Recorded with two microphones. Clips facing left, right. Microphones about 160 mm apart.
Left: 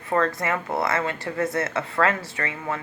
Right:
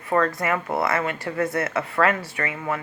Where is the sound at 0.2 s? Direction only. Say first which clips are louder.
Right 1 dB; 25° left (ahead or behind).